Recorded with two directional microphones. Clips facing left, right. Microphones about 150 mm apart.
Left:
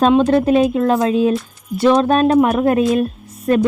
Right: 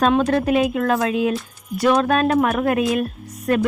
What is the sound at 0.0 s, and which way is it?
Speech, 25° left (ahead or behind).